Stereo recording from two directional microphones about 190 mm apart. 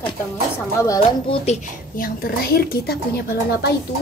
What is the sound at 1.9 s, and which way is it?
A woman's voice, 50° left (ahead or behind).